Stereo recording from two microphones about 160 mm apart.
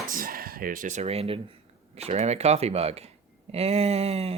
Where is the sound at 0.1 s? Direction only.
65° right (ahead or behind); by 1.5 s 40° right (ahead or behind).